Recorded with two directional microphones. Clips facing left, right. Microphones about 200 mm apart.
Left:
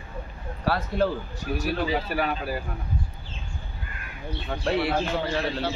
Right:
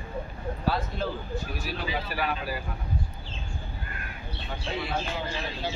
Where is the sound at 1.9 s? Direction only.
45° left (ahead or behind).